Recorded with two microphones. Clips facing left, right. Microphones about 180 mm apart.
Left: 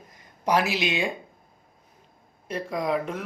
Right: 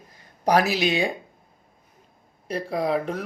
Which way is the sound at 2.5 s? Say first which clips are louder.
Right 2 dB; 35° right (ahead or behind).